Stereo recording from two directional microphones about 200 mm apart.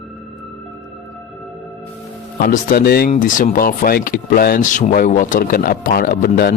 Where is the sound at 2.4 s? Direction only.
50° left (ahead or behind).